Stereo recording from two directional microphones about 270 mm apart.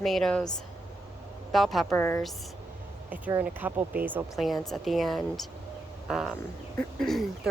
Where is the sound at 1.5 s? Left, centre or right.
Centre.